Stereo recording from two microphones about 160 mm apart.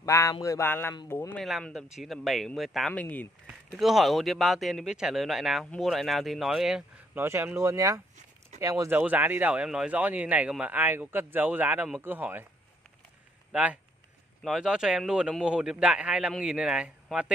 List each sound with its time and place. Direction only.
0.0 s a sound: 20° left (ahead or behind)
1.4 s speech: centre (ahead or behind)
3.4 s speech: 5° right (ahead or behind)
7.2 s a man's voice: 15° right (ahead or behind)
13.5 s speech: 10° right (ahead or behind)